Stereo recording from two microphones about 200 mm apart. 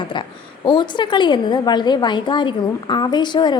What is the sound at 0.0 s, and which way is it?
A woman's voice, 25° left (ahead or behind).